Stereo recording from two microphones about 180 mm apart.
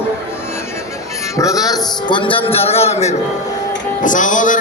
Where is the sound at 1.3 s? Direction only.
20° left (ahead or behind); by 4.6 s 45° left (ahead or behind).